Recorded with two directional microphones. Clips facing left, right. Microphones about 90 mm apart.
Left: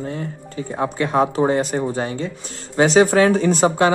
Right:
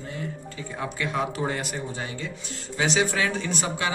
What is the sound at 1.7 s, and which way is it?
Speech, 45° left (ahead or behind).